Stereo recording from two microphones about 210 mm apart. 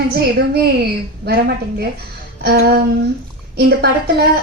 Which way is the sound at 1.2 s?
50° right (ahead or behind).